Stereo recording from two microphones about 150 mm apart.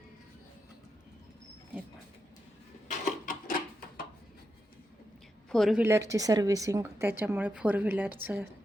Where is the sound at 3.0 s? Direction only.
60° left (ahead or behind).